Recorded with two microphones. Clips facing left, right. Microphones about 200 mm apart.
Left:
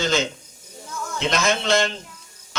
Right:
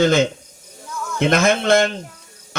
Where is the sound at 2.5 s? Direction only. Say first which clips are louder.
Right 3 dB; 55° right (ahead or behind).